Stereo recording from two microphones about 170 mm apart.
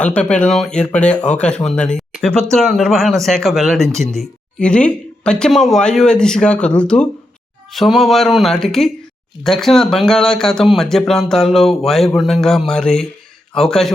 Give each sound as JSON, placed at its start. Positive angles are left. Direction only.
{"t": 0.0, "sound": "speech", "side_deg": 5}